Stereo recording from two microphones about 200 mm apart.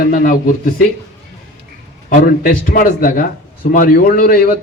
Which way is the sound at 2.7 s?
45° left (ahead or behind).